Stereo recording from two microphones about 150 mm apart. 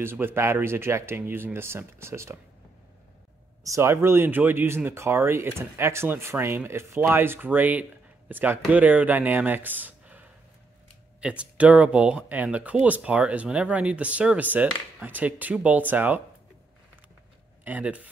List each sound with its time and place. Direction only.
0.0 s speech: 15° right (ahead or behind)
3.6 s speech: 20° right (ahead or behind)
17.6 s speech: 10° right (ahead or behind)